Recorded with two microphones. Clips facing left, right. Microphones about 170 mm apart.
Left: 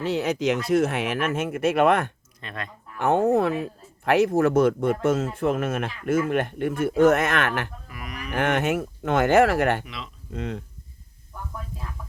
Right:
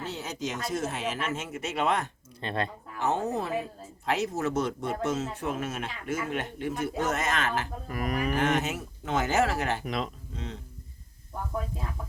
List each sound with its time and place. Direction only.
0.0 s speech: 65° left (ahead or behind)
2.4 s speech: 30° right (ahead or behind)
3.0 s speech: 55° left (ahead or behind)
7.9 s speech: 45° right (ahead or behind)
8.3 s speech: 60° left (ahead or behind)
9.8 s speech: 45° right (ahead or behind)
10.3 s speech: 60° left (ahead or behind)